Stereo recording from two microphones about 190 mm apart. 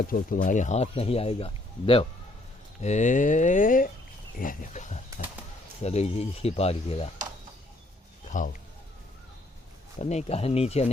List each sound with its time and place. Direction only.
0.1 s speech: 45° left (ahead or behind)
8.3 s a man's voice: 45° left (ahead or behind)
10.0 s speech: 35° left (ahead or behind)